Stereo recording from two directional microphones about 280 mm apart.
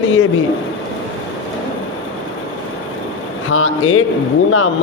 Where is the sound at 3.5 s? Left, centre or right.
Left.